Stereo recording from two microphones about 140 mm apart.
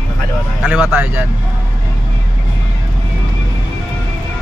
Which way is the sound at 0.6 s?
10° right (ahead or behind).